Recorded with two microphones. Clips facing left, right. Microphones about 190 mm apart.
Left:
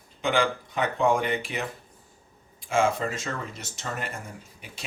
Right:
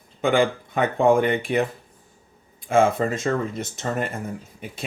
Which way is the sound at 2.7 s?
55° right (ahead or behind).